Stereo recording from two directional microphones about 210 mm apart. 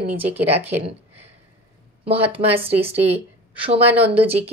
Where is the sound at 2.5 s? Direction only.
25° right (ahead or behind).